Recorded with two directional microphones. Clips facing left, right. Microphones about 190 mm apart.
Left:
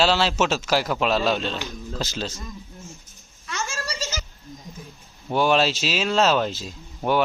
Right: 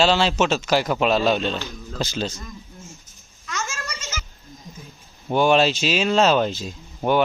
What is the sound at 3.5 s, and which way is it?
Goat, 30° left (ahead or behind).